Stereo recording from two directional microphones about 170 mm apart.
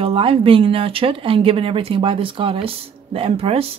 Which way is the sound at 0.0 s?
35° right (ahead or behind).